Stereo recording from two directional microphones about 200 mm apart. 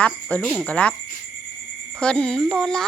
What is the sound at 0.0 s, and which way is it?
Speech, 5° left (ahead or behind).